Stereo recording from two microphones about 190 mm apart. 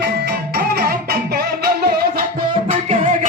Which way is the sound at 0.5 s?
50° right (ahead or behind).